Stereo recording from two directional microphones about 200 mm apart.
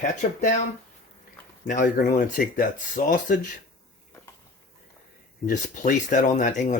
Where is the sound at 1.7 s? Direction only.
40° left (ahead or behind).